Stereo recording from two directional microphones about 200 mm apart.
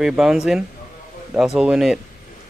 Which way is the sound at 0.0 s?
5° right (ahead or behind).